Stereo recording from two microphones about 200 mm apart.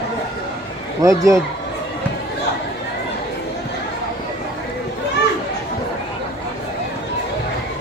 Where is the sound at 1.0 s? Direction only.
15° right (ahead or behind).